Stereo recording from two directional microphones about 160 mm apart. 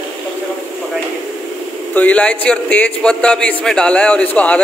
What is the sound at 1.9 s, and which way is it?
A man's voice, 10° left (ahead or behind).